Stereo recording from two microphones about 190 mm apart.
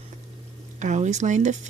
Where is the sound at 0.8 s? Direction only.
40° right (ahead or behind).